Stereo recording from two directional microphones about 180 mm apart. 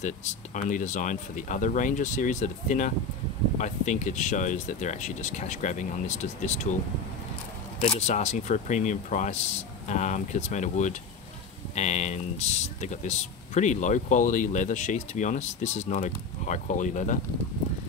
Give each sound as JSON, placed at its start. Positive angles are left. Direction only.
{"t": 0.0, "sound": "speech", "side_deg": 40}
{"t": 7.8, "sound": "speech", "side_deg": 40}